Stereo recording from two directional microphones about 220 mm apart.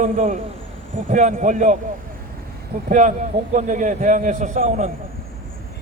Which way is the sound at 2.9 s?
35° right (ahead or behind).